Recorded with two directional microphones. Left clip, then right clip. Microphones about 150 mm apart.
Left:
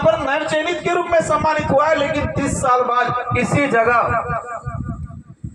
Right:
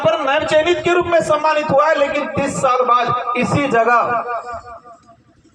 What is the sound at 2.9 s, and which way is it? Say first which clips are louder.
A man's voice: right 3 dB; 15° left (ahead or behind).